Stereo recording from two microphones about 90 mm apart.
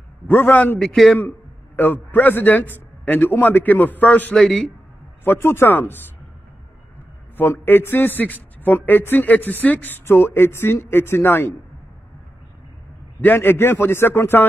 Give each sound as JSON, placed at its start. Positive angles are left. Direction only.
{"t": 0.3, "sound": "speech", "side_deg": 20}
{"t": 0.7, "sound": "a man's voice", "side_deg": 5}
{"t": 1.8, "sound": "speech", "side_deg": 20}
{"t": 4.4, "sound": "a man's voice", "side_deg": 0}
{"t": 5.2, "sound": "speech", "side_deg": 25}
{"t": 7.6, "sound": "speech", "side_deg": 25}
{"t": 13.2, "sound": "speech", "side_deg": 20}